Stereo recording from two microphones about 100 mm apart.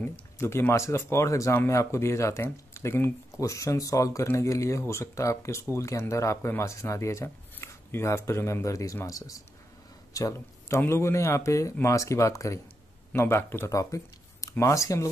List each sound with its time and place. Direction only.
0.4 s speech: 25° left (ahead or behind)
13.7 s speech: 35° left (ahead or behind)